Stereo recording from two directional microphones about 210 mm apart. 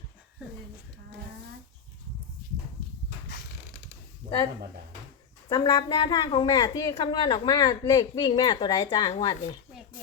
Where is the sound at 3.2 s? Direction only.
50° left (ahead or behind).